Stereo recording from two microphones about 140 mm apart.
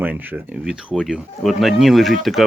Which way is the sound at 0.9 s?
Centre (ahead or behind).